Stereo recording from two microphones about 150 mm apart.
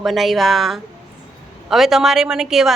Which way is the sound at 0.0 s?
Centre (ahead or behind).